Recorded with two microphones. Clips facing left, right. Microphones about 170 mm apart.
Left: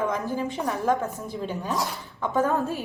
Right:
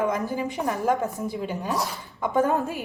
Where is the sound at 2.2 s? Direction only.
15° right (ahead or behind).